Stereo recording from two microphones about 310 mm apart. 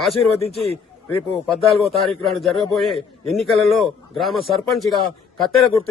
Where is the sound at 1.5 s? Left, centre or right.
Centre.